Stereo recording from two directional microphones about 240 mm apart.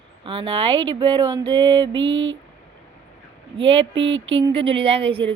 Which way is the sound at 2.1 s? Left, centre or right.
Right.